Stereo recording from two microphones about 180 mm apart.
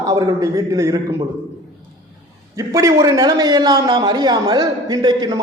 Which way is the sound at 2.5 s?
20° right (ahead or behind).